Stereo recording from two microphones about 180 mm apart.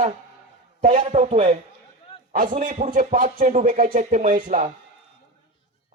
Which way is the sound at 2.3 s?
50° right (ahead or behind).